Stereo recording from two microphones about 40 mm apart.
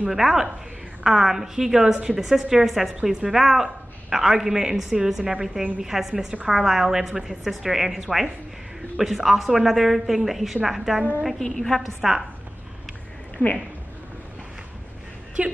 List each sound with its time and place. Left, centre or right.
0.1 s a woman's voice: centre
3.0 s a woman's voice: centre
3.3 s a woman's voice: centre
11.4 s a woman's voice: centre
11.8 s a woman's voice: centre
13.4 s a woman's voice: left